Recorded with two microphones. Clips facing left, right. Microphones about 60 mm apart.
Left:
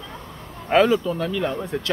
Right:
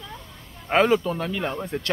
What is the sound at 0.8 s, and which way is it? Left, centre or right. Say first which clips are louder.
Speech: left 1 dB; right.